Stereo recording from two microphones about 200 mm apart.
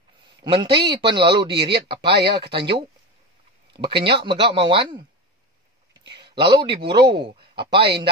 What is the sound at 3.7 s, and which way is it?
Speech, 25° right (ahead or behind).